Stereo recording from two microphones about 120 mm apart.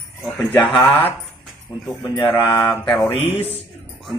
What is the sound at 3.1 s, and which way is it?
Speech, 60° left (ahead or behind).